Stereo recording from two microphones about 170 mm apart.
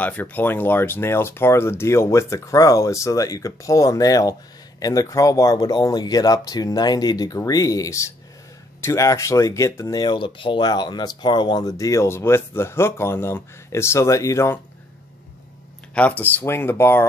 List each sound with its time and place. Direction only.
0.0 s speech: 10° left (ahead or behind)
15.9 s speech: 10° left (ahead or behind)